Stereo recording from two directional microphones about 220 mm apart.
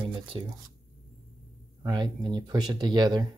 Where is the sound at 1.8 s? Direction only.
20° right (ahead or behind).